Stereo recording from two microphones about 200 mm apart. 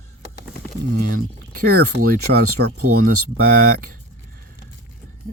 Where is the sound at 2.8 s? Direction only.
90° right.